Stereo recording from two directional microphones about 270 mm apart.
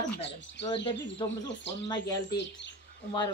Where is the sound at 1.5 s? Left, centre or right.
Left.